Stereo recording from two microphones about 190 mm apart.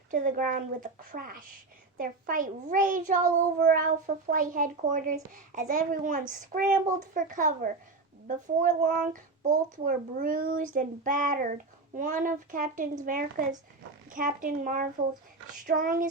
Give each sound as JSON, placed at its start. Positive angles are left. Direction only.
{"t": 0.1, "sound": "a child's voice", "side_deg": -45}